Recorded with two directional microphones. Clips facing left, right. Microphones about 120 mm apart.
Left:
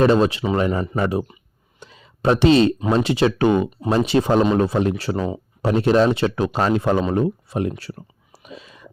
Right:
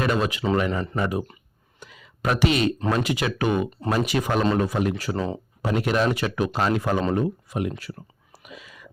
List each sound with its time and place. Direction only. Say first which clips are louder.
0.0 s speech: left 7 dB; 30° left (ahead or behind)
1.8 s a sound: left 7 dB; 30° left (ahead or behind)
2.9 s speech: left 6 dB; 30° left (ahead or behind)
5.1 s speech: left 3 dB; 15° left (ahead or behind)
5.6 s speech: left 6 dB; 30° left (ahead or behind)
8.4 s whispering: left 4 dB; 30° left (ahead or behind)